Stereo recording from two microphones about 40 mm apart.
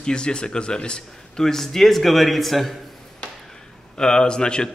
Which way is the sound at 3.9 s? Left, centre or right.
Centre.